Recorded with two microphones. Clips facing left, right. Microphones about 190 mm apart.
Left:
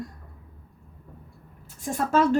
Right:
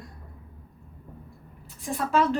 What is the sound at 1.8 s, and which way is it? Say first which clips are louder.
Speech: left 2 dB; 45° left (ahead or behind).